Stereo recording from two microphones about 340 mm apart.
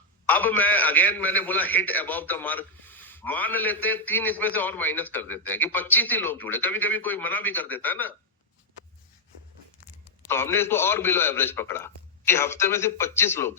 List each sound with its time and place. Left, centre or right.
0.3 s a man's voice: centre
10.2 s a man's voice: centre